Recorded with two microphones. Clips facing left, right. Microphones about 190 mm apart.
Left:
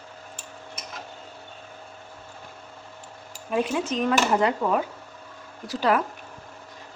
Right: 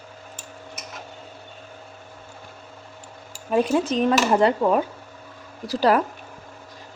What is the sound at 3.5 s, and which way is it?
Speech, 35° right (ahead or behind).